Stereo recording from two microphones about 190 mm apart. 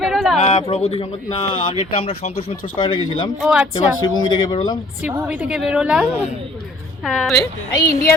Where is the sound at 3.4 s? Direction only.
5° right (ahead or behind).